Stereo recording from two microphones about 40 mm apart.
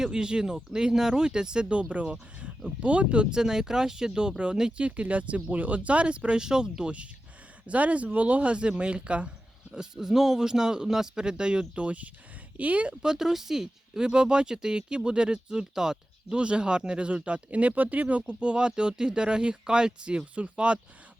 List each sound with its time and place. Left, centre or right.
0.0 s speech: centre
3.3 s speech: centre
9.7 s speech: centre
11.7 s speech: right
12.9 s speech: centre; by 18.2 s right
18.3 s speech: right